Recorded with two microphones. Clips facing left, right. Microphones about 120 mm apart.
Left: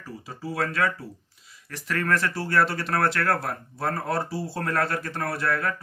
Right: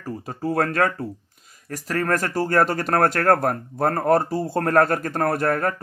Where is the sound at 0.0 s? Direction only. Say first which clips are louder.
Right 8 dB; 50° right (ahead or behind).